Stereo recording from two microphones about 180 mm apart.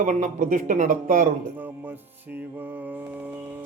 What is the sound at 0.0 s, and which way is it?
A man's voice, 45° right (ahead or behind).